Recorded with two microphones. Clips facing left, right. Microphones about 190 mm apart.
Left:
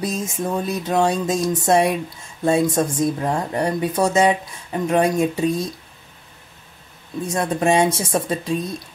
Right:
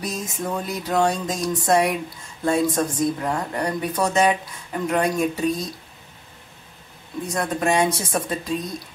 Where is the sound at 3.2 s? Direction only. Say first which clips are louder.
Left 3 dB; 25° left (ahead or behind).